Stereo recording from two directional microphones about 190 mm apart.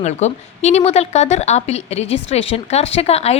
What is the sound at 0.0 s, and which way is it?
A woman's voice, 35° left (ahead or behind).